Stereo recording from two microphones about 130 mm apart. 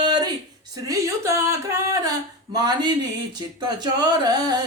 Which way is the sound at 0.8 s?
25° right (ahead or behind).